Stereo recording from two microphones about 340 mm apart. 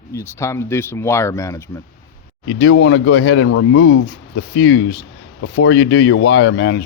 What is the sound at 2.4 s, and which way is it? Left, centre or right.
Speech, left.